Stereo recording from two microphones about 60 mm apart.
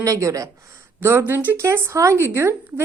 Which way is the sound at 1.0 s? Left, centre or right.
Right.